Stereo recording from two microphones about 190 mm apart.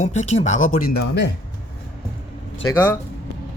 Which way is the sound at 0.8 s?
55° left (ahead or behind).